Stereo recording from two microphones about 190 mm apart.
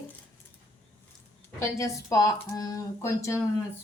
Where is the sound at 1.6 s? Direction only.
15° left (ahead or behind).